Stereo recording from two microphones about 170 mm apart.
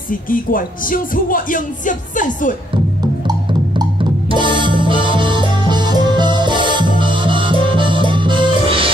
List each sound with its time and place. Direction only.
0.1 s speech: 55° left (ahead or behind)
3.3 s music: 25° right (ahead or behind)